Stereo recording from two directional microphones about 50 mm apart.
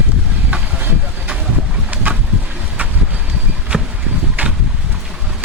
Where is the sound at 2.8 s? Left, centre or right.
Right.